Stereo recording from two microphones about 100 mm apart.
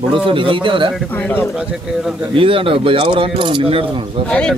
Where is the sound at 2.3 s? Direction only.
65° right (ahead or behind).